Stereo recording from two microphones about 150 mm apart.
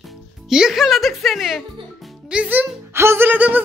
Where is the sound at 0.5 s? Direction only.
5° right (ahead or behind).